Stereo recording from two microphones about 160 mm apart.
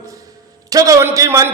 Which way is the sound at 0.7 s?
20° right (ahead or behind).